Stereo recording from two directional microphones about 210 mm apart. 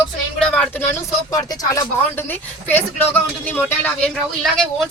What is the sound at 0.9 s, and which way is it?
Speech, 15° left (ahead or behind).